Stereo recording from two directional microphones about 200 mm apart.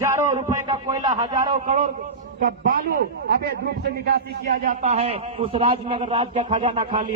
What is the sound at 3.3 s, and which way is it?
A man's voice, 50° right (ahead or behind).